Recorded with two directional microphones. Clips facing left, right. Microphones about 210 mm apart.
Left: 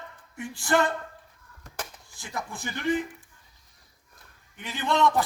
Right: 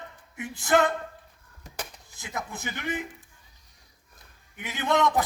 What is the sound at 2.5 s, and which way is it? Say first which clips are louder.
Speech: left 8 dB; 20° right (ahead or behind).